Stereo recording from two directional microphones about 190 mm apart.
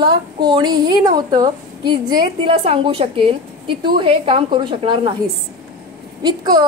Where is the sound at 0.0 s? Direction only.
25° right (ahead or behind).